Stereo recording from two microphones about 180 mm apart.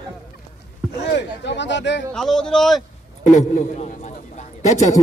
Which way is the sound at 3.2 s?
40° left (ahead or behind).